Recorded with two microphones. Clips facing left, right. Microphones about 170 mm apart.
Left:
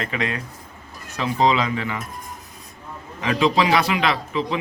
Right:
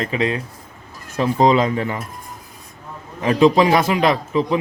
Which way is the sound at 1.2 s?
45° right (ahead or behind).